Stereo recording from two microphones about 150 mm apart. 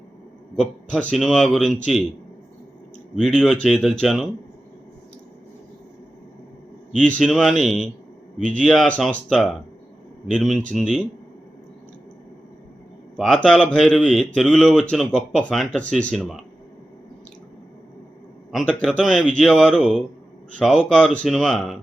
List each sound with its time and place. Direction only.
0.5 s speech: 5° left (ahead or behind)
3.2 s speech: 5° left (ahead or behind)
6.9 s speech: 5° left (ahead or behind)
13.1 s speech: 5° left (ahead or behind)
18.8 s speech: centre (ahead or behind)